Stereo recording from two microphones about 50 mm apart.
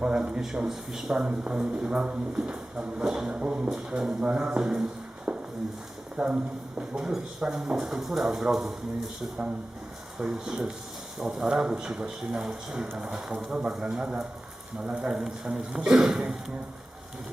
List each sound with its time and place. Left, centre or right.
0.0 s a man's voice: centre
6.9 s speech: centre
10.2 s a man's voice: centre